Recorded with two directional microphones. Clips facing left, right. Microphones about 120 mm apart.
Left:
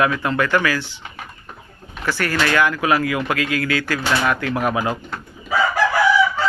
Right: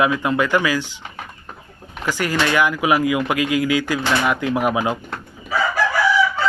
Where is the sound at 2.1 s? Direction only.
15° right (ahead or behind).